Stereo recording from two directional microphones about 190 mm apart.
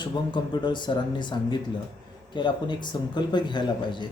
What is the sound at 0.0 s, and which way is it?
Speech, 25° left (ahead or behind).